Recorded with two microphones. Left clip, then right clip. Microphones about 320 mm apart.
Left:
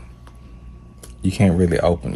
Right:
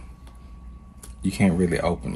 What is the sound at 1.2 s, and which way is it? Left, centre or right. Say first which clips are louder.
Speech: left 4 dB; left.